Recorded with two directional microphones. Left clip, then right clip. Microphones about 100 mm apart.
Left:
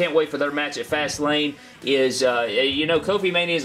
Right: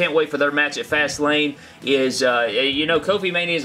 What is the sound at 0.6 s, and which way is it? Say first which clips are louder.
Speech: right 5 dB; 30° right (ahead or behind).